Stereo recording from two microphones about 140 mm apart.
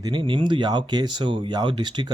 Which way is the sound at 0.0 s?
35° right (ahead or behind).